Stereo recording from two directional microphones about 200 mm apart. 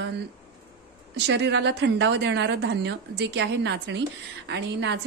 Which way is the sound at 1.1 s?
60° right (ahead or behind).